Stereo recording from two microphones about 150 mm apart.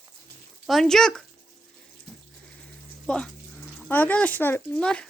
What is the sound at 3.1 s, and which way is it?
Speech, 5° left (ahead or behind).